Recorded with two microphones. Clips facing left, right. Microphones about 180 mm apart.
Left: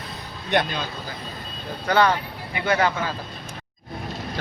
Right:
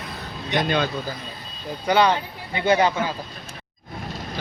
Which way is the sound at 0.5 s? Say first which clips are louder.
Left 2 dB; 55° left (ahead or behind).